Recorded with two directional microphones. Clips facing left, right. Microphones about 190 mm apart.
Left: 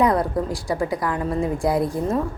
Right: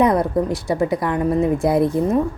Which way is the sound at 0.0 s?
20° right (ahead or behind).